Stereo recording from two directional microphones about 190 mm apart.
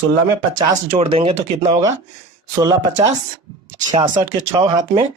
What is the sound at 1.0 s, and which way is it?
Speech, 30° right (ahead or behind).